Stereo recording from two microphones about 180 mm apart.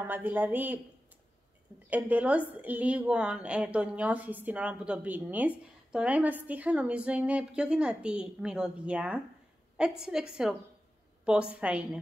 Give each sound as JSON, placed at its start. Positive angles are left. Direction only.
{"t": 0.0, "sound": "a woman's voice", "side_deg": -10}
{"t": 1.9, "sound": "a woman's voice", "side_deg": -10}